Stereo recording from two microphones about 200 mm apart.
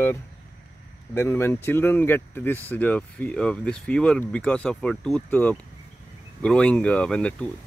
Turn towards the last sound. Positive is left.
turn(degrees=5)  # may be behind; listen again after turning